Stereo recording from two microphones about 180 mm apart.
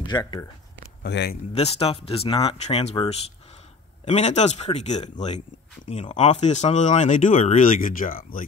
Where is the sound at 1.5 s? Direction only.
35° left (ahead or behind).